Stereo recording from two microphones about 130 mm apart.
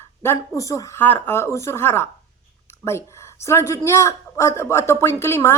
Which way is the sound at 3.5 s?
20° left (ahead or behind).